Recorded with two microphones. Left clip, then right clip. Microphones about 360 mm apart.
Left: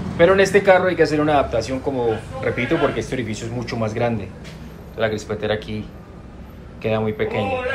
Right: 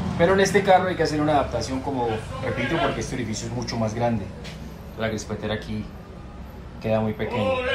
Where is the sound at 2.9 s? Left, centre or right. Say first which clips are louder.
Left 5 dB; centre.